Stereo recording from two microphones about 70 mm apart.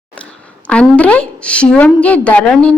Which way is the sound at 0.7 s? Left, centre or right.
Centre.